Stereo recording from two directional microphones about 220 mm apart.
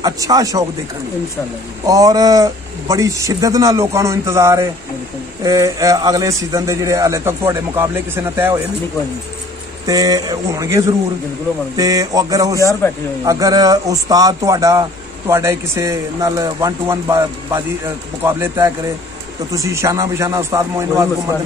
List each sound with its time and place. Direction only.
0.0 s a man's voice: 15° right (ahead or behind)
1.9 s a man's voice: 15° right (ahead or behind)
9.8 s a man's voice: 15° right (ahead or behind)
12.5 s speech: 15° left (ahead or behind)
13.2 s a man's voice: 15° right (ahead or behind)